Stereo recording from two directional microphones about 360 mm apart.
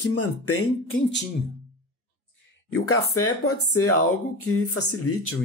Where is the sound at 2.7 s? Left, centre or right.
Left.